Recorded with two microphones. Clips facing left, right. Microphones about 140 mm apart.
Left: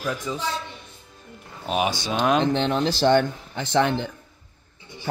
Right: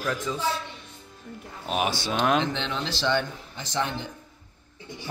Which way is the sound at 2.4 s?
45° left (ahead or behind).